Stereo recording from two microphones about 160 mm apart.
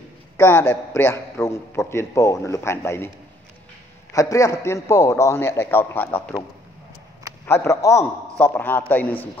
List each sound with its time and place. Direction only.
0.4 s a man's voice: 15° left (ahead or behind)
4.1 s a man's voice: 20° left (ahead or behind)
7.4 s a man's voice: 15° left (ahead or behind)